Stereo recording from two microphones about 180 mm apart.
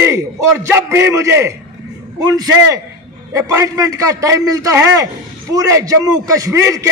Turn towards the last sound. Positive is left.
turn(degrees=-15)  # may be behind; listen again after turning